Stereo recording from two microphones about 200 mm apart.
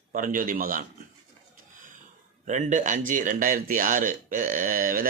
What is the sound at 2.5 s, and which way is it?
Speech, 35° right (ahead or behind).